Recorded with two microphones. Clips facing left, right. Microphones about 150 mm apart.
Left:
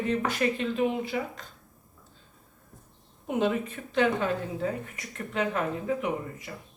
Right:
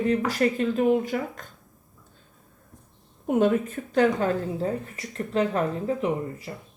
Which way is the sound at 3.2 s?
50° right (ahead or behind).